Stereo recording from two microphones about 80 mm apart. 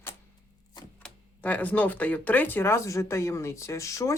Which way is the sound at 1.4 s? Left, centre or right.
Centre.